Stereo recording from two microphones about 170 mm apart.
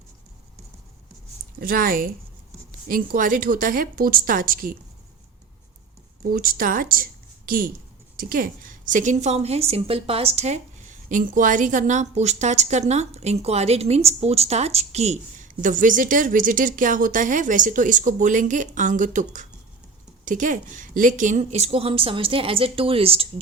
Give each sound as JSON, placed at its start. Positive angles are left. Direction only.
{"t": 1.5, "sound": "speech", "side_deg": -60}
{"t": 6.3, "sound": "a woman's voice", "side_deg": -55}